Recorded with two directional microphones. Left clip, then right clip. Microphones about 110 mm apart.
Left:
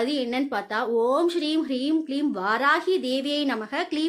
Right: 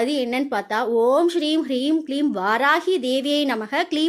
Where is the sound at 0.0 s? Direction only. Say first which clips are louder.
Right 4 dB; 30° right (ahead or behind).